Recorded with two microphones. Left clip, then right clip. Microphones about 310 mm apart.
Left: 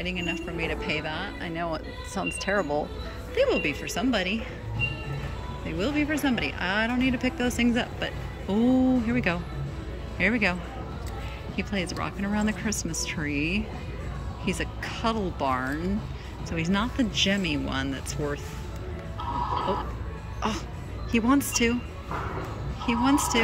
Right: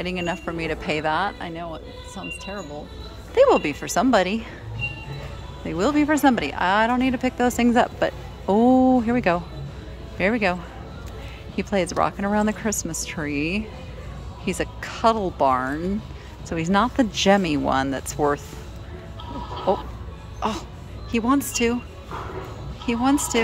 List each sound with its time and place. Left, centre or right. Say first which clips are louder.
0.0 s speech: right 4 dB; centre
3.3 s speech: right 8 dB; centre
5.7 s speech: right 7 dB; centre
13.3 s speech: right 4 dB; right
14.4 s speech: right 4 dB; centre
19.7 s speech: right 7 dB; centre
20.3 s music: right 4 dB; centre
21.1 s speech: right 2 dB; centre
22.8 s speech: right 2 dB; centre